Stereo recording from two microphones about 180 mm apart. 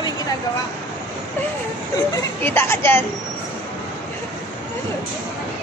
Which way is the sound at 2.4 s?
15° left (ahead or behind).